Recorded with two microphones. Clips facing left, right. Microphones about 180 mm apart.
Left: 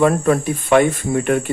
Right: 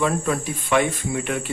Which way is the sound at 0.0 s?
55° left (ahead or behind).